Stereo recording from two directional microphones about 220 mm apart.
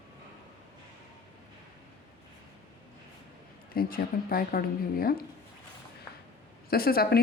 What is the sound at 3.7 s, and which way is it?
Speech, 40° left (ahead or behind).